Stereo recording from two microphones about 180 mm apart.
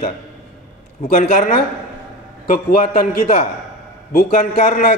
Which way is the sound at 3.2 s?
35° left (ahead or behind).